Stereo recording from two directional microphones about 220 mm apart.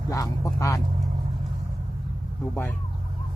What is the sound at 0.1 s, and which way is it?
Speech, 15° left (ahead or behind).